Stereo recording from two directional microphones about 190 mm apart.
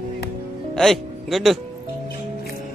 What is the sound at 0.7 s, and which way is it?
Speech, centre (ahead or behind).